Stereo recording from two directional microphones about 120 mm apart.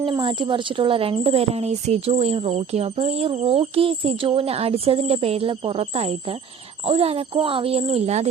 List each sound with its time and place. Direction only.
0.2 s speech: 45° right (ahead or behind); by 8.3 s 65° right (ahead or behind)